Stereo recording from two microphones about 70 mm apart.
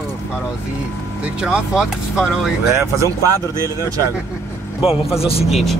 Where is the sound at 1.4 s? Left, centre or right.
Centre.